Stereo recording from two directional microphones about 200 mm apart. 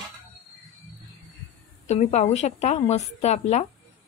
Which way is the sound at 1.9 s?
35° left (ahead or behind).